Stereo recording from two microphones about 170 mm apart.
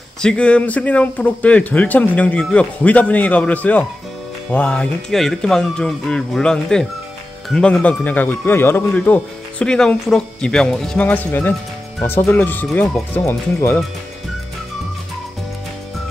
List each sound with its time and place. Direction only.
0.2 s speech: 5° left (ahead or behind)